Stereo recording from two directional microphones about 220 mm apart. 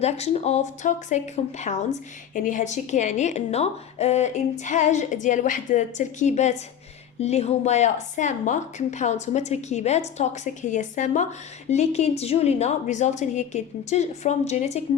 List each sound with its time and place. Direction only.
0.0 s a woman's voice: 30° left (ahead or behind)